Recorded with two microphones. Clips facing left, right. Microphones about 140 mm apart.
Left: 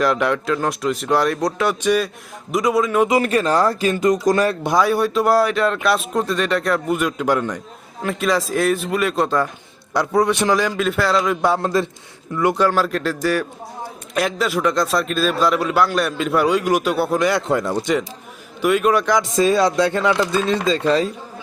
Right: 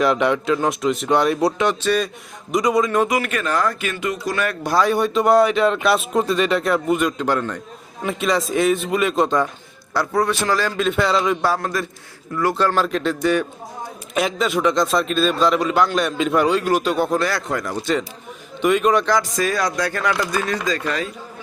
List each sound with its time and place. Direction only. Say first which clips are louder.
0.0 s a man's voice: right 1 dB; centre (ahead or behind)
1.8 s speech: left 5 dB; 10° left (ahead or behind)
2.5 s a man's voice: even; centre (ahead or behind)
3.1 s speech: left 4 dB; 35° left (ahead or behind)
4.6 s speech: left 1 dB; 15° left (ahead or behind)
4.9 s a man's voice: even; centre (ahead or behind)
8.0 s a man's voice: left 1 dB; centre (ahead or behind)
9.9 s speech: left 2 dB; 20° left (ahead or behind)
10.8 s a man's voice: even; 5° left (ahead or behind)
11.4 s speech: left 3 dB; 25° left (ahead or behind)
12.4 s a man's voice: left 2 dB; 15° left (ahead or behind)
18.6 s a man's voice: even; 5° left (ahead or behind)
19.2 s speech: left 5 dB; 25° left (ahead or behind)